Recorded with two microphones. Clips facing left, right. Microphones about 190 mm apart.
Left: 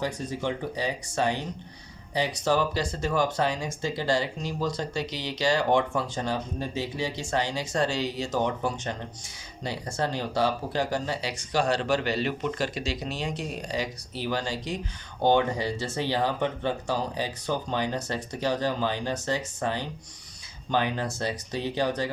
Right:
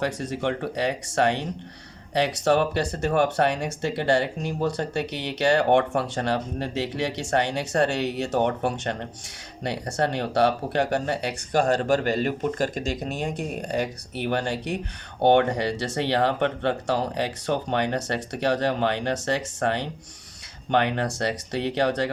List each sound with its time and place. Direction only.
0.0 s speech: 70° right (ahead or behind)